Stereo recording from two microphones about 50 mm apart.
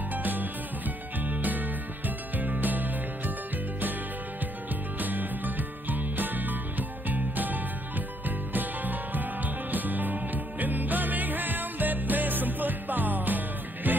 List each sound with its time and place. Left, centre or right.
0.1 s music: right
4.9 s music: right